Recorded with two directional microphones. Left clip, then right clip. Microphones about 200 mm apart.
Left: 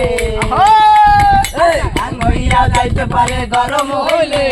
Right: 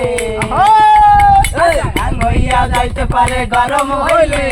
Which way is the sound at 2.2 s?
50° right (ahead or behind).